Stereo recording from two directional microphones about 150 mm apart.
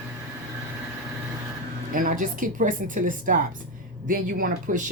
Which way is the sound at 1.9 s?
65° right (ahead or behind).